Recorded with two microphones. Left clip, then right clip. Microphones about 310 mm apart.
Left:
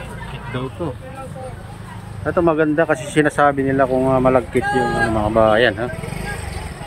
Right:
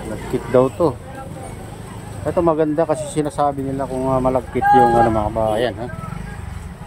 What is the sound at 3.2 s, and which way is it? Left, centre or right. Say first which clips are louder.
Speech: left 7 dB; centre.